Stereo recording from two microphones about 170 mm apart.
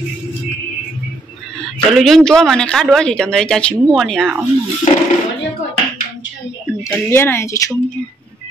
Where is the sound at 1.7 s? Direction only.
Centre (ahead or behind).